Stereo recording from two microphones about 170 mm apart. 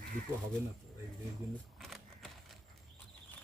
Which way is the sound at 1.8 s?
Centre (ahead or behind).